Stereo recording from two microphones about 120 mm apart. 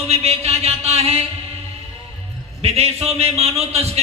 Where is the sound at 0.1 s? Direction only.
60° right (ahead or behind).